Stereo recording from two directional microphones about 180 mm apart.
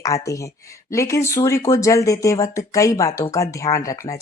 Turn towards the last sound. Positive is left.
turn(degrees=15)  # may be behind; listen again after turning